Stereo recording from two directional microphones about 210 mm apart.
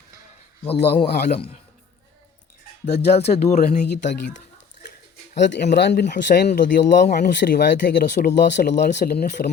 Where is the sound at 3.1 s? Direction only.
30° left (ahead or behind).